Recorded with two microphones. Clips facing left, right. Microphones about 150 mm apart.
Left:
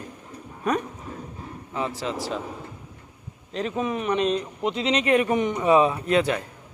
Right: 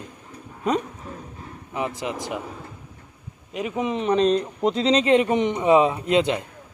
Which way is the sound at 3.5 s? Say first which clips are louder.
Right 1 dB; 10° right (ahead or behind).